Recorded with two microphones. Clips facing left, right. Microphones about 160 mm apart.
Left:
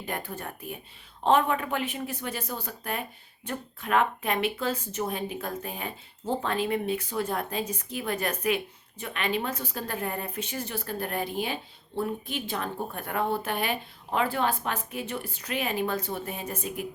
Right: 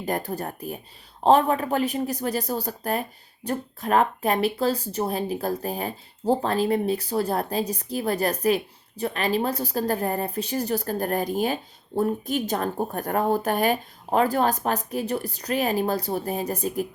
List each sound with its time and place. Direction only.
0.0 s speech: 40° right (ahead or behind)